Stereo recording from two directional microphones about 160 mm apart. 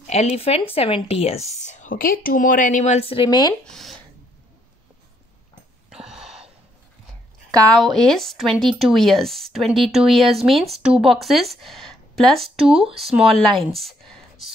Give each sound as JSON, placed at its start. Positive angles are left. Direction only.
{"t": 0.0, "sound": "speech", "side_deg": 45}
{"t": 3.6, "sound": "speech", "side_deg": 0}
{"t": 5.9, "sound": "a sound", "side_deg": -5}
{"t": 7.7, "sound": "speech", "side_deg": 0}